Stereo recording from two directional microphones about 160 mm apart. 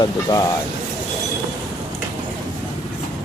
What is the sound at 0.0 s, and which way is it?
Speech, 25° left (ahead or behind).